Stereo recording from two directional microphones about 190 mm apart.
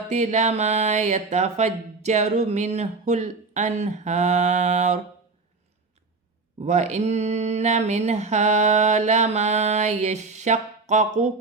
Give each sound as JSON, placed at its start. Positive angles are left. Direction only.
{"t": 0.1, "sound": "speech", "side_deg": -35}
{"t": 6.6, "sound": "speech", "side_deg": -35}